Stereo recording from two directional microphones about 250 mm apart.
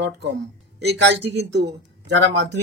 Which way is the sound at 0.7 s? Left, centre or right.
Right.